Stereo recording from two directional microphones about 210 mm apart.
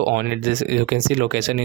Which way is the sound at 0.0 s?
55° right (ahead or behind).